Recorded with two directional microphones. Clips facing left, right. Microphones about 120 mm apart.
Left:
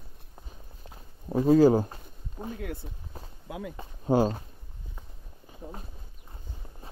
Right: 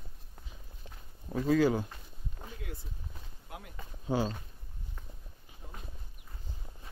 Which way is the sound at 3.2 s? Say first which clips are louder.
Left 8 dB; 40° left (ahead or behind).